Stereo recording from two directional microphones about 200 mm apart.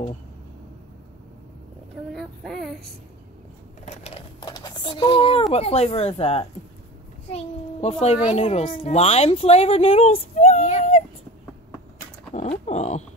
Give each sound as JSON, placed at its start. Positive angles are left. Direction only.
{"t": 2.1, "sound": "child singing", "side_deg": 0}
{"t": 3.8, "sound": "a sound", "side_deg": 30}
{"t": 5.5, "sound": "a child's voice", "side_deg": 30}
{"t": 12.4, "sound": "speech", "side_deg": 35}